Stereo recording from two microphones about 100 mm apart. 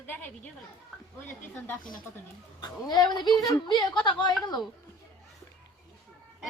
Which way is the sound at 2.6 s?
40° left (ahead or behind).